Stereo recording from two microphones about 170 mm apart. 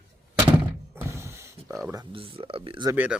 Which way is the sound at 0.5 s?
15° right (ahead or behind).